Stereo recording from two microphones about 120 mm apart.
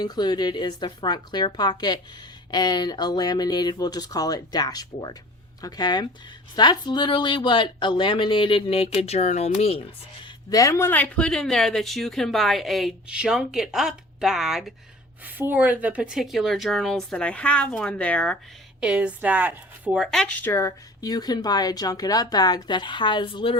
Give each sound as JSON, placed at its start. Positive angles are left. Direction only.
{"t": 0.0, "sound": "speech", "side_deg": 35}
{"t": 10.5, "sound": "speech", "side_deg": 25}
{"t": 15.2, "sound": "speech", "side_deg": -15}
{"t": 18.8, "sound": "a woman's voice", "side_deg": -10}
{"t": 20.1, "sound": "speech", "side_deg": 5}
{"t": 20.4, "sound": "speech", "side_deg": 20}